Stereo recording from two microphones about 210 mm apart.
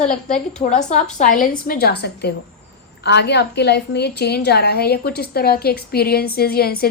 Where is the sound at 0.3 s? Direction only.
5° left (ahead or behind).